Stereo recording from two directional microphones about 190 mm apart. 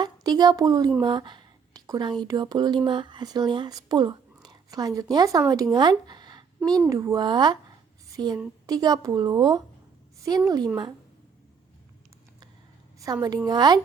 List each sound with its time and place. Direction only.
0.0 s a woman's voice: 20° right (ahead or behind)
1.0 s a sound: 25° right (ahead or behind)
2.2 s speech: 20° right (ahead or behind)
13.2 s speech: 20° right (ahead or behind)